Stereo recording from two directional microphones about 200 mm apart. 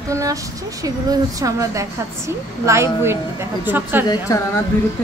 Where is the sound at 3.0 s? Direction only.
10° right (ahead or behind).